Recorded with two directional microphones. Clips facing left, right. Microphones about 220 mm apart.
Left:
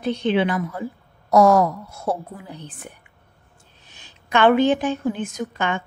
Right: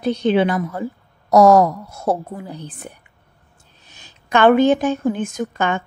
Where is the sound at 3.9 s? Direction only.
40° right (ahead or behind).